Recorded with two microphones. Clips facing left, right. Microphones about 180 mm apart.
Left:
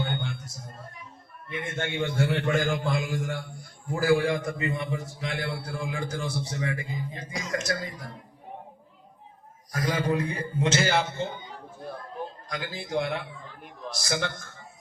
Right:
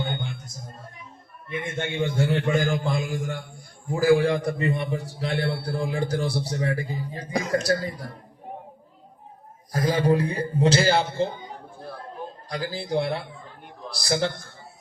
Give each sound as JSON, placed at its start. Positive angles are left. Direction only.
{"t": 1.5, "sound": "a man's voice", "side_deg": -20}
{"t": 4.3, "sound": "a man's voice", "side_deg": -35}
{"t": 9.7, "sound": "a man's voice", "side_deg": -30}
{"t": 12.5, "sound": "a man's voice", "side_deg": -35}